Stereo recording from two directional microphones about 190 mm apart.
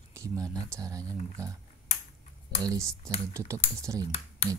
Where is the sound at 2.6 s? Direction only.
20° right (ahead or behind).